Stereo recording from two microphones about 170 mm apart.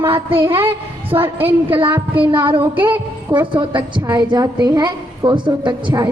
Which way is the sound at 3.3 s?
30° right (ahead or behind).